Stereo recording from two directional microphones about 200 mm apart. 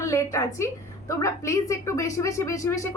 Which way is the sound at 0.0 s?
15° left (ahead or behind).